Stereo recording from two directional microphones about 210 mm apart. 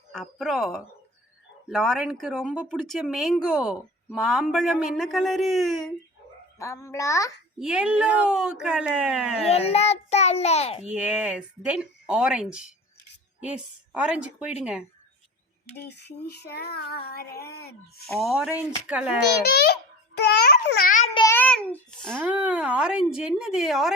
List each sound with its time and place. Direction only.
0.1 s speech: centre (ahead or behind)
6.6 s a child's voice: 15° left (ahead or behind)
7.6 s speech: 5° right (ahead or behind)
9.5 s a child's voice: 30° left (ahead or behind)
10.8 s speech: 5° right (ahead or behind)
15.9 s child singing: 50° left (ahead or behind)
18.0 s speech: centre (ahead or behind)
19.5 s babbling: 50° left (ahead or behind)
21.1 s child singing: 20° left (ahead or behind)
21.3 s babbling: 5° left (ahead or behind)
22.2 s speech: 5° right (ahead or behind)